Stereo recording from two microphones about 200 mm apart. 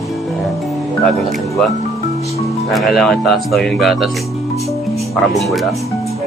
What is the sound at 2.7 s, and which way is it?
Speech, centre (ahead or behind).